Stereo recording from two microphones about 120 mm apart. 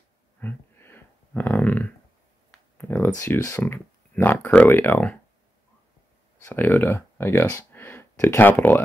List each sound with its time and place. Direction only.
0.4 s a sound: 15° left (ahead or behind)
2.8 s speech: 20° left (ahead or behind)
6.4 s speech: 20° left (ahead or behind)